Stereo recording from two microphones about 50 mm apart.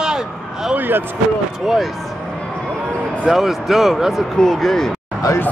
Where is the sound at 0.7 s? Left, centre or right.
Right.